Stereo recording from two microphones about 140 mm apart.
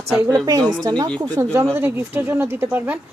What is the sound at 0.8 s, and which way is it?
A woman's voice, 30° right (ahead or behind).